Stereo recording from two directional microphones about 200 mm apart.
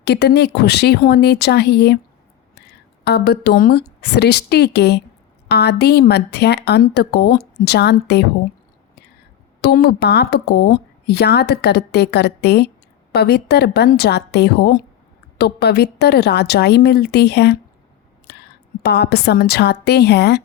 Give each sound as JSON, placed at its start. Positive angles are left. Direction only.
{"t": 0.0, "sound": "speech", "side_deg": 55}
{"t": 9.6, "sound": "a woman's voice", "side_deg": 55}